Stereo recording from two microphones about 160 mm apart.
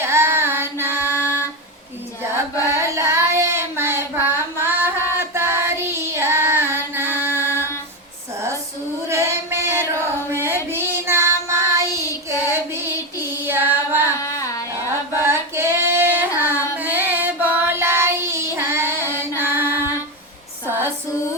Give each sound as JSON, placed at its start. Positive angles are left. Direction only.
{"t": 0.0, "sound": "female singing", "side_deg": -15}
{"t": 2.6, "sound": "child singing", "side_deg": -15}
{"t": 7.1, "sound": "a sound", "side_deg": -10}
{"t": 9.0, "sound": "female singing", "side_deg": -15}
{"t": 14.2, "sound": "carnatic music", "side_deg": 20}
{"t": 14.8, "sound": "female singing", "side_deg": -15}
{"t": 16.7, "sound": "child singing", "side_deg": -10}
{"t": 19.4, "sound": "music", "side_deg": -15}